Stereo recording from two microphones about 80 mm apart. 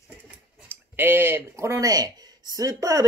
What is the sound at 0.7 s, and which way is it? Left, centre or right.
Speech, right.